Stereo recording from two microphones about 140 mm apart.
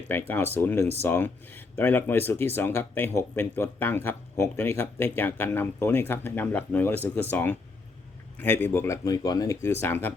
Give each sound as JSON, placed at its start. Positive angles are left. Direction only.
{"t": 0.1, "sound": "speech", "side_deg": 15}